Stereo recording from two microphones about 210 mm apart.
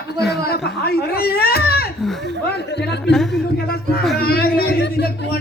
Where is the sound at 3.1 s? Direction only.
Centre (ahead or behind).